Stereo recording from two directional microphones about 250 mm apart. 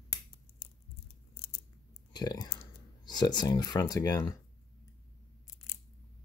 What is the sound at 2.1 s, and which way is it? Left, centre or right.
Speech, centre.